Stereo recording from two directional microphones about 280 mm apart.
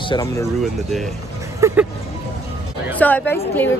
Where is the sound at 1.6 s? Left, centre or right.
Centre.